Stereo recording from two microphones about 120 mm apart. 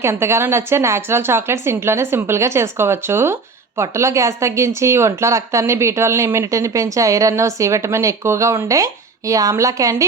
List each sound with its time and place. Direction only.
0.0 s a woman's voice: 20° right (ahead or behind)